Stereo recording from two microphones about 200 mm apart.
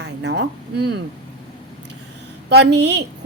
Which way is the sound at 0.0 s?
60° right (ahead or behind).